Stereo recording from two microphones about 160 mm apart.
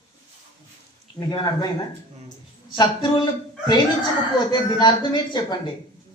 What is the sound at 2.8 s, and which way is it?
A man's voice, 30° left (ahead or behind).